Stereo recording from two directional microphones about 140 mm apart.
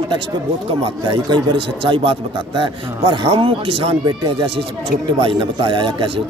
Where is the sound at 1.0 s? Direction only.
35° right (ahead or behind).